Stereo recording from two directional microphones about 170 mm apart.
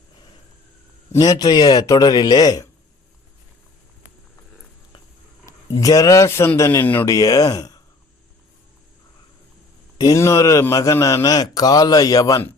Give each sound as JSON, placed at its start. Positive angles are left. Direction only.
{"t": 1.1, "sound": "a man's voice", "side_deg": 20}
{"t": 5.8, "sound": "a man's voice", "side_deg": 20}
{"t": 10.0, "sound": "a man's voice", "side_deg": 20}